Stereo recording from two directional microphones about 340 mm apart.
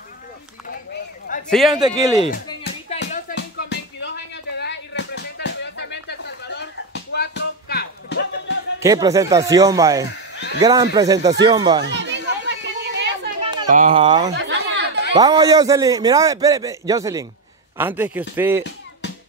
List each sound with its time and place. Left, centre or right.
1.5 s a man's voice: centre
2.1 s music: left
8.7 s a man's voice: centre
10.3 s a sound: left
10.6 s a man's voice: centre
11.8 s chatter: right
13.4 s speech: centre
14.3 s a sound: right
15.1 s a man's voice: centre